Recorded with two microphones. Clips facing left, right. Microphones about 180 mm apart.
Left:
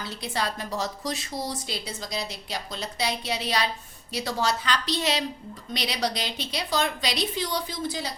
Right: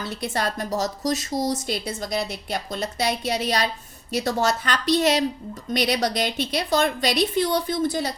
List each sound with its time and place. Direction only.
0.2 s a woman's voice: 50° right (ahead or behind)